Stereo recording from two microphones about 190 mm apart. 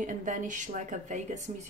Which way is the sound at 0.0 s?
40° right (ahead or behind).